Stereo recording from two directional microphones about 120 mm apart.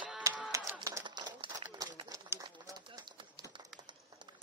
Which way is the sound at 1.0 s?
40° right (ahead or behind).